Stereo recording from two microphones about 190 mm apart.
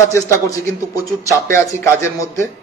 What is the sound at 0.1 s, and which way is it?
A man's voice, 15° left (ahead or behind).